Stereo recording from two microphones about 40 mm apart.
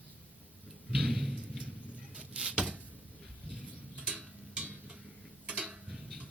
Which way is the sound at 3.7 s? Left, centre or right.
Right.